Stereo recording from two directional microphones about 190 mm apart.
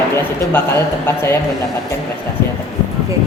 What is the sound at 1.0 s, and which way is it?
Speech, 10° left (ahead or behind).